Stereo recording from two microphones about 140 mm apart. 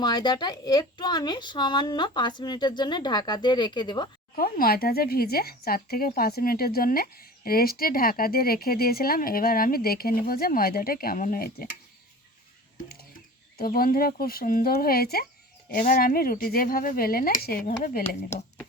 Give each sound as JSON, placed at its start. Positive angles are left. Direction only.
{"t": 0.0, "sound": "a woman's voice", "side_deg": 30}
{"t": 4.4, "sound": "speech", "side_deg": 90}
{"t": 12.7, "sound": "a sound", "side_deg": 90}
{"t": 13.6, "sound": "speech", "side_deg": 90}